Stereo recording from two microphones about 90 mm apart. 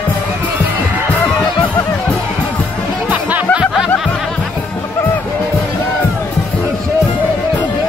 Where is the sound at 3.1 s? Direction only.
15° right (ahead or behind).